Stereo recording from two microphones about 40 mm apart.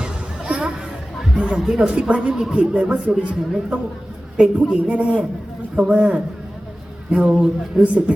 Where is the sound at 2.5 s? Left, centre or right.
Right.